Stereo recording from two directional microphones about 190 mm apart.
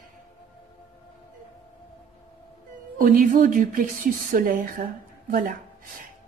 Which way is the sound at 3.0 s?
45° right (ahead or behind).